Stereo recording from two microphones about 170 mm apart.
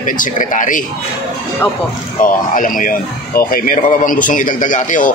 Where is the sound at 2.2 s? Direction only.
55° left (ahead or behind).